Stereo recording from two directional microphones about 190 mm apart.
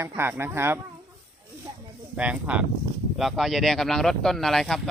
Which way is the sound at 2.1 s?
5° right (ahead or behind).